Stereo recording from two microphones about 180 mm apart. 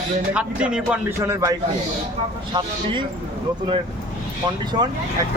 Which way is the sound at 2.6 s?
25° right (ahead or behind).